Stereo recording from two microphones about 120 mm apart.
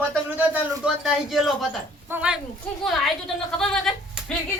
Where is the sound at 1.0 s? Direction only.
Centre (ahead or behind).